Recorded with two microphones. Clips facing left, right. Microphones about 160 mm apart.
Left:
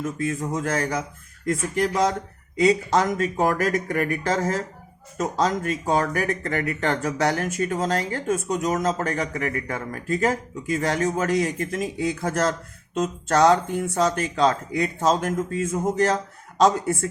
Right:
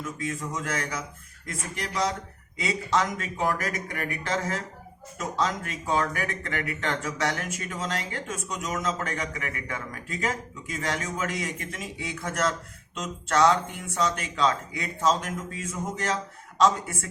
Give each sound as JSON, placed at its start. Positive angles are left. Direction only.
{"t": 0.0, "sound": "speech", "side_deg": 50}